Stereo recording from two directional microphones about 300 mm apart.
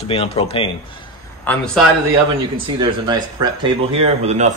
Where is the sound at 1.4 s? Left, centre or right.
Centre.